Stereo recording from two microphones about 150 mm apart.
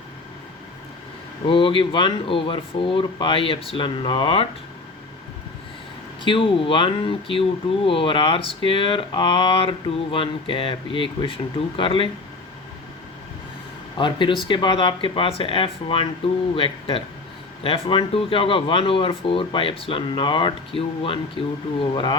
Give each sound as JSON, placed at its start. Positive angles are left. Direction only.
{"t": 1.5, "sound": "speech", "side_deg": 35}
{"t": 6.2, "sound": "speech", "side_deg": 35}
{"t": 14.0, "sound": "speech", "side_deg": 30}